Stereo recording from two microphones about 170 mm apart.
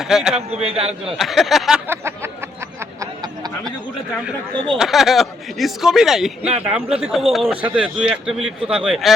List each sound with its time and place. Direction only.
0.0 s speech: 5° right (ahead or behind)
0.3 s a man's voice: 35° right (ahead or behind)
1.2 s speech: centre (ahead or behind)
1.9 s a sound: 15° right (ahead or behind)
4.5 s speech: 30° right (ahead or behind)
4.8 s speech: centre (ahead or behind)